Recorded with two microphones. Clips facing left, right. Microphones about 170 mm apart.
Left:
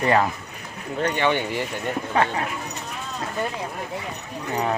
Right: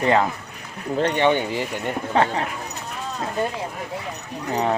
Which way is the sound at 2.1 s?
30° right (ahead or behind).